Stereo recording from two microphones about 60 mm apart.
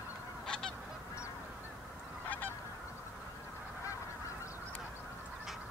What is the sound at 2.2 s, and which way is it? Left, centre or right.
Goose, left.